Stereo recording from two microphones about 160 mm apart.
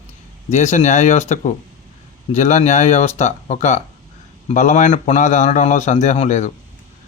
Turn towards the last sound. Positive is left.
turn(degrees=45)  # may be behind; listen again after turning